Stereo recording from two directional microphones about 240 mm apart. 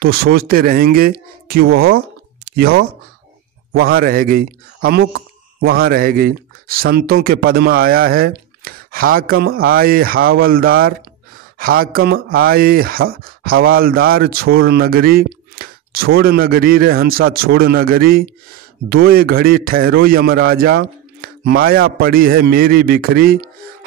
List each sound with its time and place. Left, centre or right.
0.0 s speech: right